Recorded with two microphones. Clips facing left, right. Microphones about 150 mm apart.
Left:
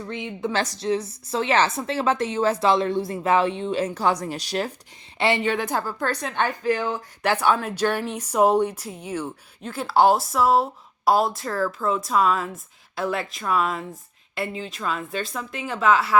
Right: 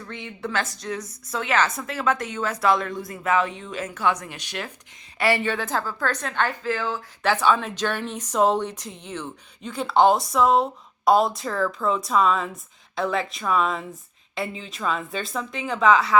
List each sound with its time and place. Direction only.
0.1 s a woman's voice: 20° left (ahead or behind)
0.5 s a woman's voice: 35° left (ahead or behind)
5.2 s a woman's voice: 20° left (ahead or behind); by 16.1 s 5° left (ahead or behind)